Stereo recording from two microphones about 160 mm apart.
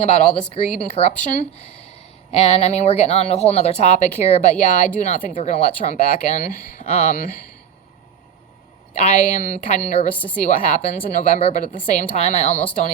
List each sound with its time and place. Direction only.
0.5 s speech: 40° left (ahead or behind)
8.9 s speech: 45° left (ahead or behind)
10.2 s a woman's voice: 10° left (ahead or behind)
10.4 s speech: 50° left (ahead or behind)